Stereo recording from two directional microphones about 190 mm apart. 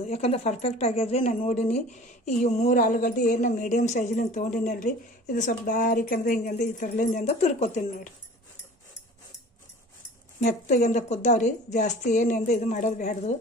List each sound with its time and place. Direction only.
0.0 s speech: 35° left (ahead or behind)
10.4 s speech: 40° left (ahead or behind)